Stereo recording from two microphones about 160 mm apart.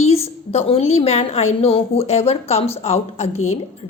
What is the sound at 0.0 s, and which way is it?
A woman's voice, 40° left (ahead or behind).